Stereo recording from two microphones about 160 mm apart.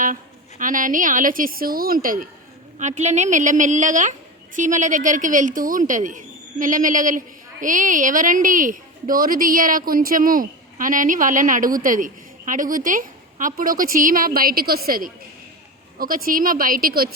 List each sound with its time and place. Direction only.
0.6 s a woman's voice: 55° right (ahead or behind)
2.7 s a woman's voice: 45° right (ahead or behind); by 17.1 s 65° right (ahead or behind)